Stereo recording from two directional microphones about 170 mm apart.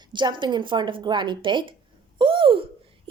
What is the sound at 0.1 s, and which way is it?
A child's voice, 25° right (ahead or behind).